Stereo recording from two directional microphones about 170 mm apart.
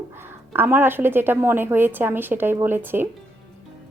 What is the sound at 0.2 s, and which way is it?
Speech, 10° right (ahead or behind).